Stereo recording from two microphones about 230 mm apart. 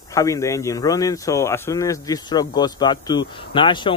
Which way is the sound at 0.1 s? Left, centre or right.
Centre.